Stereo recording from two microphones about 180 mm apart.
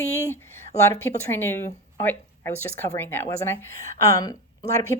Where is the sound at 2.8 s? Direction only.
15° left (ahead or behind).